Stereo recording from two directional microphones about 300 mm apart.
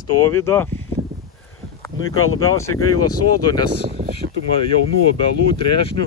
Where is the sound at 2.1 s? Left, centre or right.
Left.